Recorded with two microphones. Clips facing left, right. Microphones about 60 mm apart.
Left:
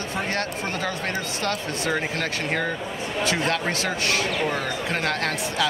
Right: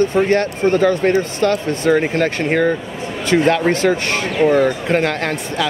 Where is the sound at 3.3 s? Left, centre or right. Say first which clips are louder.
Right 13 dB; right.